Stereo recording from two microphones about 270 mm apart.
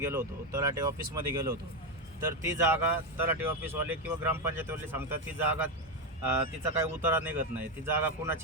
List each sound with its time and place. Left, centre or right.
0.0 s speech: centre
6.7 s speech: centre